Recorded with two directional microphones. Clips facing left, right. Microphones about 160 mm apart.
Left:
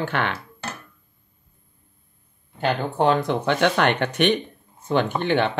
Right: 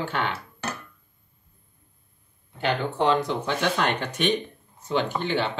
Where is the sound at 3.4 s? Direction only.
65° left (ahead or behind).